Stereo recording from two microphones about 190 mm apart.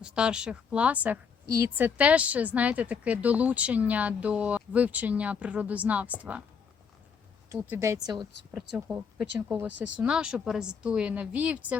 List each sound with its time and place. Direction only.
0.0 s a woman's voice: 5° right (ahead or behind)
7.5 s a woman's voice: 10° right (ahead or behind)
8.7 s speech: 5° right (ahead or behind)